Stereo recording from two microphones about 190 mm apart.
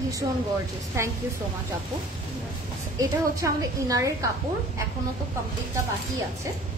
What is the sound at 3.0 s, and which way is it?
A woman's voice, 15° right (ahead or behind).